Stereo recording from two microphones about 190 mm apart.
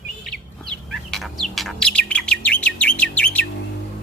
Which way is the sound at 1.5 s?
Centre (ahead or behind).